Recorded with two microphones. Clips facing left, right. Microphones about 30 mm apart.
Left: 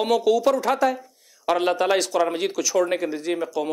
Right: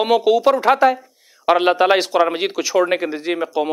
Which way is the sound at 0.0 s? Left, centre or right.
Right.